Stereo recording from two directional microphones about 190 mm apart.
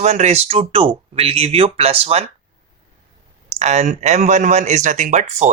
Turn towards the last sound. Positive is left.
turn(degrees=-40)  # may be behind; listen again after turning